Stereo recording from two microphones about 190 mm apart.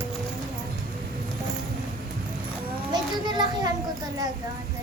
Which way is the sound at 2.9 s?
25° right (ahead or behind).